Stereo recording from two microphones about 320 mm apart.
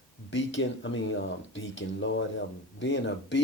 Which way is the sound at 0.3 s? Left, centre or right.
Left.